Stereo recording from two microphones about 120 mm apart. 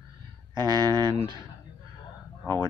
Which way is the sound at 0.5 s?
35° right (ahead or behind).